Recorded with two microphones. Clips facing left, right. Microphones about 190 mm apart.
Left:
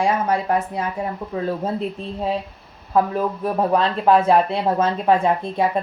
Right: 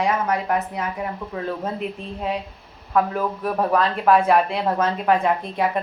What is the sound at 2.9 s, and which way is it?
A woman's voice, 25° left (ahead or behind).